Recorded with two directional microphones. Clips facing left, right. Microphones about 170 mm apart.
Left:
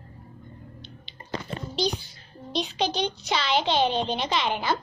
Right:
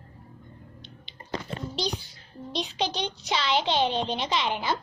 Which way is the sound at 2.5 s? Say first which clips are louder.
Left 2 dB; 10° left (ahead or behind).